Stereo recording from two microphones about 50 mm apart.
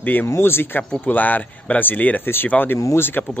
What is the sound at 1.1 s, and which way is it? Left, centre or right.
Speech, left.